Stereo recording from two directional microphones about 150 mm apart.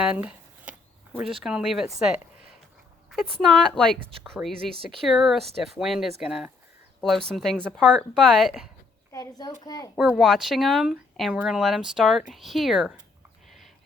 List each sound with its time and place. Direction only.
0.0 s speech: 5° right (ahead or behind)
9.1 s a child's voice: 25° left (ahead or behind)
10.2 s speech: centre (ahead or behind)